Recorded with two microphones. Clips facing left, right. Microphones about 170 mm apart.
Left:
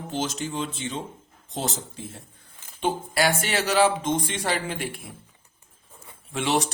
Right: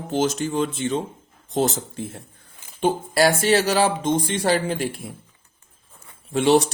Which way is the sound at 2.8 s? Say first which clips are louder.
Right 5 dB; 35° right (ahead or behind).